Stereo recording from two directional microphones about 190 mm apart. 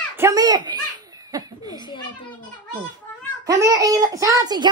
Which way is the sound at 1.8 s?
25° left (ahead or behind).